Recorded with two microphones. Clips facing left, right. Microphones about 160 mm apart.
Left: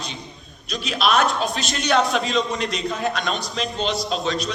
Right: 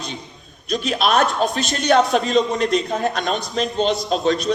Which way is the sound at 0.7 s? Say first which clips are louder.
Right 2 dB; 50° right (ahead or behind).